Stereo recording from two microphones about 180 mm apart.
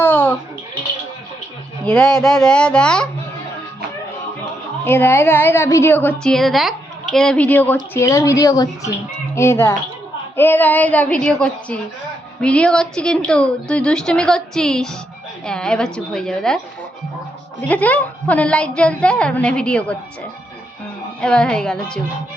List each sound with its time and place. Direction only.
0.0 s bird: 10° left (ahead or behind)
1.8 s a woman's voice: 5° left (ahead or behind)
4.9 s a woman's voice: 15° left (ahead or behind)
17.7 s a woman's voice: 10° left (ahead or behind)
21.2 s a woman's voice: 5° left (ahead or behind)